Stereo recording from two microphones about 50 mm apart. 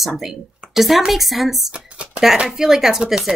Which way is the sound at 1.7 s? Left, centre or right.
Right.